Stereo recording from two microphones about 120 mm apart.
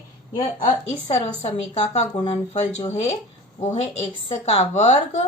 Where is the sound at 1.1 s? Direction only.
70° left (ahead or behind).